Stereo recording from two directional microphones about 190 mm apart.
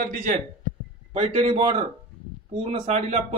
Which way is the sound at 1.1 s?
35° right (ahead or behind).